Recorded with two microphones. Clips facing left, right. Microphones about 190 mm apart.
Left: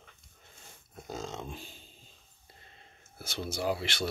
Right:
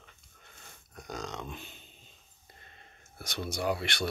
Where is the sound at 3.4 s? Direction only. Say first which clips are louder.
Even; 25° left (ahead or behind).